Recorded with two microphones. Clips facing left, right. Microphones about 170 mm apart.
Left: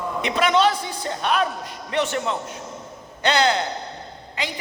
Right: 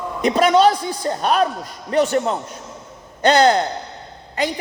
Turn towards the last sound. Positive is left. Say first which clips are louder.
# right 7 dB
turn(degrees=-45)  # may be behind; listen again after turning